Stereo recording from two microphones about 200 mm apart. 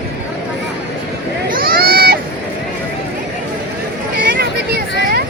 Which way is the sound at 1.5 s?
50° right (ahead or behind).